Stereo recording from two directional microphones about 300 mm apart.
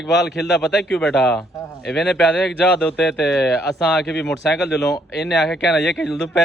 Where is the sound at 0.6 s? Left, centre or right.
Centre.